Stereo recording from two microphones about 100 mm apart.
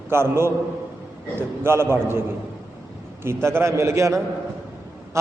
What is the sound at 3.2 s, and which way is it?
A man's voice, 25° right (ahead or behind).